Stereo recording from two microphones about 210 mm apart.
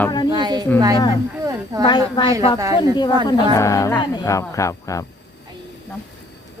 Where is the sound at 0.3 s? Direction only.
20° right (ahead or behind).